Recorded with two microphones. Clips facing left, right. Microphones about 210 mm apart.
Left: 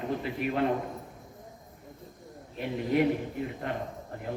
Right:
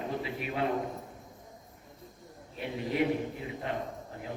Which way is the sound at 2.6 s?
50° left (ahead or behind).